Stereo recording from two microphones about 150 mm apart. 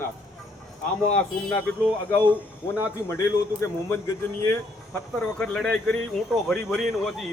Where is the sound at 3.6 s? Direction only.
20° left (ahead or behind).